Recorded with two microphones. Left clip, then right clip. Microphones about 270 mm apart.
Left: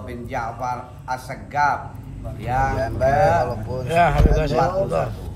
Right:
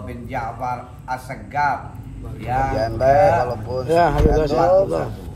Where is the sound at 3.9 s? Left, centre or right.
Centre.